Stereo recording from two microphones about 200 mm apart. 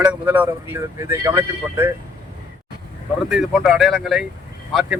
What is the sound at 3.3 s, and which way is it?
Speech, centre (ahead or behind).